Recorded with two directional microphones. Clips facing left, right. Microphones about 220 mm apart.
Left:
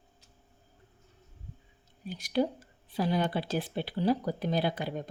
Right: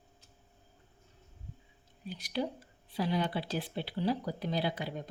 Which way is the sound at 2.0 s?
45° left (ahead or behind).